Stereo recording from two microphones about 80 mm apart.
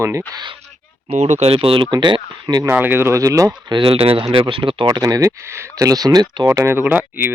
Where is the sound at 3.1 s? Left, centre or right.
Right.